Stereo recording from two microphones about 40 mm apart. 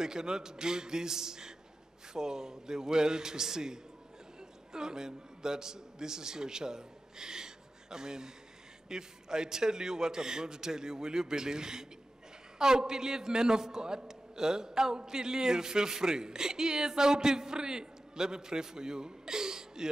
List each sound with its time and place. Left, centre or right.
0.0 s a man's voice: centre